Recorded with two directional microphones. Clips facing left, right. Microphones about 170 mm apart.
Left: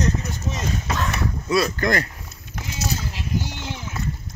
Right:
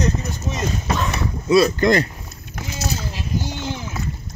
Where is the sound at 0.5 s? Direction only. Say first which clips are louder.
Right 2 dB; 80° right.